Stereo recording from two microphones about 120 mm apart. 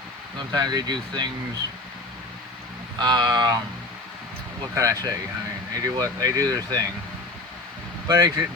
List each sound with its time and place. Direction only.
0.3 s speech: 35° right (ahead or behind)
3.0 s speech: 35° right (ahead or behind)
4.7 s speech: 25° right (ahead or behind)
8.0 s speech: 25° right (ahead or behind)